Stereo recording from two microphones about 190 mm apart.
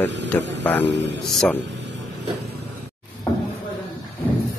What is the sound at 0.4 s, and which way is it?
Speech, 70° right (ahead or behind).